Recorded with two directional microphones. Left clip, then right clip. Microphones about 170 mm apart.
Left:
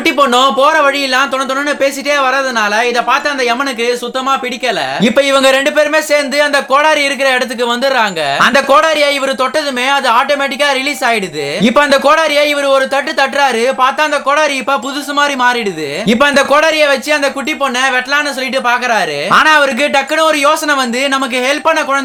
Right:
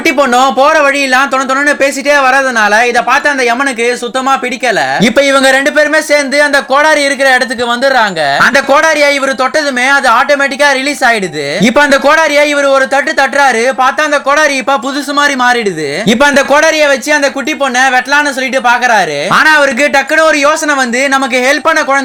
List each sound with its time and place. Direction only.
0.0 s speech: 20° right (ahead or behind)
4.9 s speech: 15° right (ahead or behind)